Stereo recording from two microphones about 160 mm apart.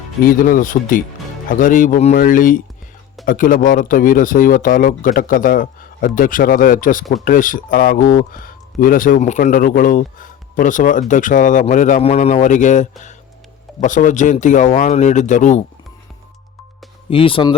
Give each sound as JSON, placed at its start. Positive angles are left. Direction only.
{"t": 0.2, "sound": "speech", "side_deg": 65}
{"t": 17.1, "sound": "speech", "side_deg": 35}